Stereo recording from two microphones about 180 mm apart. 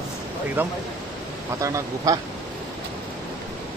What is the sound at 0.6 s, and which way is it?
Speech, 10° right (ahead or behind).